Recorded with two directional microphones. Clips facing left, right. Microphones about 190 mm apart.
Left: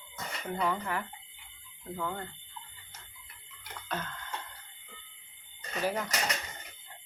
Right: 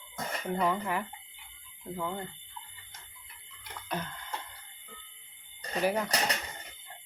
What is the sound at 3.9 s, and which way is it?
Music, 15° right (ahead or behind).